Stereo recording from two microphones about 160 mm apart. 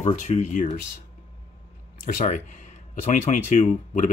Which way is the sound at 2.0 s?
50° left (ahead or behind).